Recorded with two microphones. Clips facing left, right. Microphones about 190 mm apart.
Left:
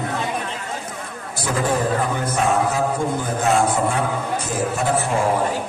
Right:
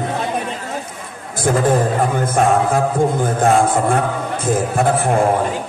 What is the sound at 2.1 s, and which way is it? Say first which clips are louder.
Music: right 5 dB; 50° right (ahead or behind).